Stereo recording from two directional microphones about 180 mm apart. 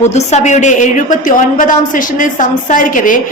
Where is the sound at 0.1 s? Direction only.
40° left (ahead or behind).